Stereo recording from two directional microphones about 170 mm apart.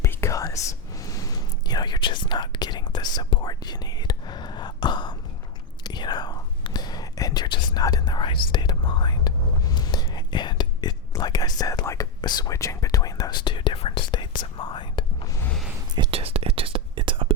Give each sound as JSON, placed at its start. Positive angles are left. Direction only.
{"t": 0.0, "sound": "whispering", "side_deg": 15}
{"t": 16.0, "sound": "whispering", "side_deg": -35}